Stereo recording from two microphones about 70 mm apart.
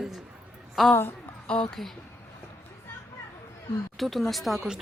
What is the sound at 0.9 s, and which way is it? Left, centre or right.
Speech, left.